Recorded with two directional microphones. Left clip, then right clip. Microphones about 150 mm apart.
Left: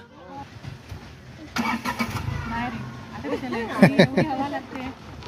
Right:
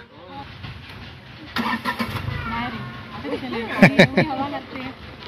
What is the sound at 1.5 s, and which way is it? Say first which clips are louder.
Vehicle: right 2 dB; 60° left (ahead or behind).